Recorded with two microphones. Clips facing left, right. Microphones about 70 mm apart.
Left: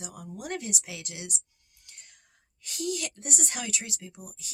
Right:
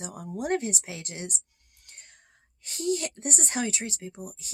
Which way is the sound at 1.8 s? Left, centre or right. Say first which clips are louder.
Right 2 dB; right.